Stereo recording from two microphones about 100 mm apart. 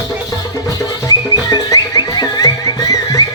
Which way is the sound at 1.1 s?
40° left (ahead or behind).